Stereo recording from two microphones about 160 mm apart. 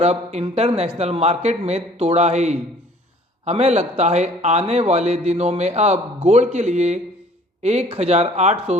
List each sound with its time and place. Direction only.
0.0 s a man's voice: 40° right (ahead or behind)